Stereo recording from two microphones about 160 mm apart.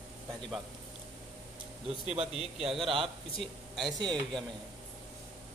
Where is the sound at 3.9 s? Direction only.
25° right (ahead or behind).